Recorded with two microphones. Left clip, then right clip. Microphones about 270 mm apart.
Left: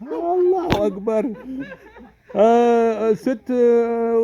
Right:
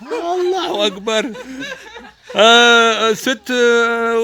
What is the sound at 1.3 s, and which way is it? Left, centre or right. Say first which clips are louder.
Speech: right 5 dB; right.